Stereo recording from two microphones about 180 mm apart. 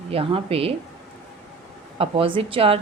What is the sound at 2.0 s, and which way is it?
Speech, 30° right (ahead or behind).